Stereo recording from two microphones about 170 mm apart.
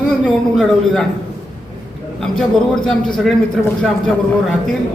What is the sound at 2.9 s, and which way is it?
Speech, 5° left (ahead or behind).